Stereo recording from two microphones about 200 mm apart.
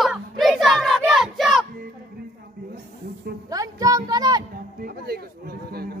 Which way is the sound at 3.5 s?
15° right (ahead or behind).